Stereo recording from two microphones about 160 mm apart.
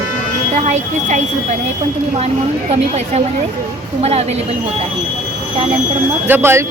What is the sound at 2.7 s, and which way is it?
Speech, 40° right (ahead or behind).